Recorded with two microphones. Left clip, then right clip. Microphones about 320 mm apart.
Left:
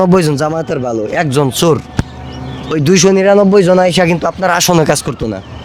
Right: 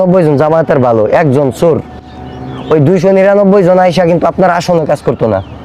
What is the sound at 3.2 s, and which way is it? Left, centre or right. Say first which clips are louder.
Speech: right 2 dB; centre.